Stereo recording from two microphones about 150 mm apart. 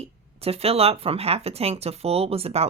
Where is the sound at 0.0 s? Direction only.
40° right (ahead or behind).